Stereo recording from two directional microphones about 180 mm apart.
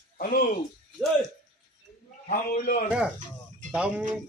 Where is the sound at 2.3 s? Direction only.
50° left (ahead or behind).